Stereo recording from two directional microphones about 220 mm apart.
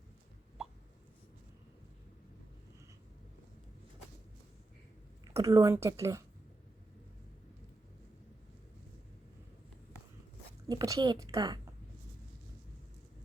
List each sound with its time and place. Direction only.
5.2 s speech: 15° right (ahead or behind)
10.7 s a woman's voice: 15° right (ahead or behind)